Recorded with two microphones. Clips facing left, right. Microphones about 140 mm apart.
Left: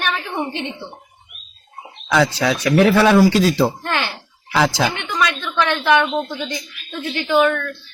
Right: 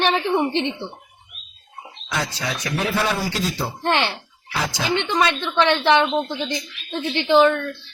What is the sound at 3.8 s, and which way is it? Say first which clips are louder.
Speech: right 2 dB; 25° right (ahead or behind).